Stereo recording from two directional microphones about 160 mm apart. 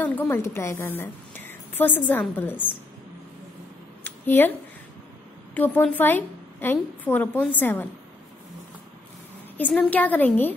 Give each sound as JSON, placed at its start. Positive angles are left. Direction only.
{"t": 0.0, "sound": "a woman's voice", "side_deg": 10}
{"t": 4.0, "sound": "a sound", "side_deg": 15}
{"t": 5.5, "sound": "a woman's voice", "side_deg": 10}
{"t": 9.6, "sound": "a woman's voice", "side_deg": 10}